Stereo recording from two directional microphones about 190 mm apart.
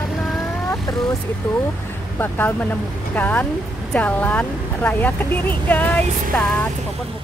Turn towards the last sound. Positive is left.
turn(degrees=5)  # may be behind; listen again after turning